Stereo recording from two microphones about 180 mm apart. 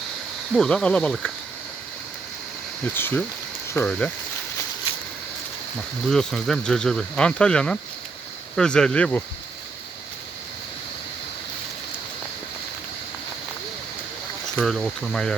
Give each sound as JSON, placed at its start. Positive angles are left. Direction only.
{"t": 0.5, "sound": "speech", "side_deg": 5}
{"t": 2.8, "sound": "speech", "side_deg": 10}
{"t": 6.1, "sound": "speech", "side_deg": 5}
{"t": 14.5, "sound": "speech", "side_deg": 5}